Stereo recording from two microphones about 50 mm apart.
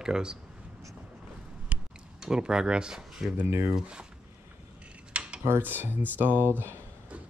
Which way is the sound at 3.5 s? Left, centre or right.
Right.